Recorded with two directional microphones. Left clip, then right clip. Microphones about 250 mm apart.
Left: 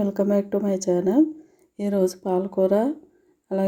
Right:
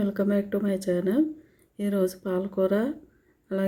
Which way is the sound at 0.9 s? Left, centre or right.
Left.